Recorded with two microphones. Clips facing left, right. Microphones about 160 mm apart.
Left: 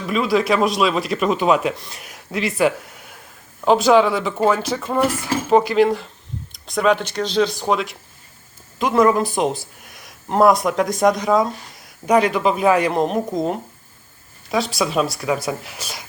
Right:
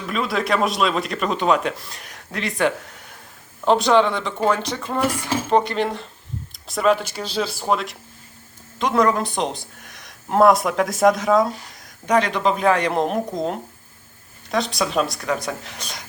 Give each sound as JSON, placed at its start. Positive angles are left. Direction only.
{"t": 0.1, "sound": "speech", "side_deg": 0}